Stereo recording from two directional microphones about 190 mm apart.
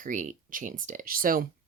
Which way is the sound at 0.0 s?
40° right (ahead or behind).